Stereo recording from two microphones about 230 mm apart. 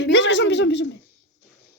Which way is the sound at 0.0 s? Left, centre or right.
Left.